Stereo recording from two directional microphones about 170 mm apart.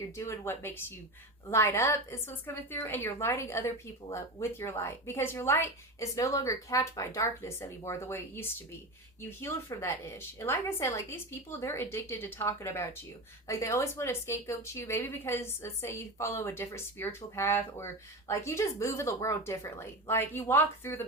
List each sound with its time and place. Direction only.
0.2 s a woman's voice: 15° left (ahead or behind)